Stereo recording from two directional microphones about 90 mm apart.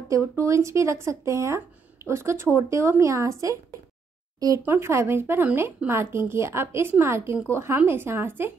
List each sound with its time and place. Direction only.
0.1 s speech: 35° right (ahead or behind)
4.6 s speech: 30° right (ahead or behind)